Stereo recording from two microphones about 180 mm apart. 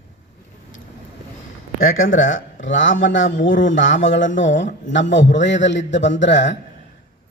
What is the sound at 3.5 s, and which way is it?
Speech, 50° left (ahead or behind).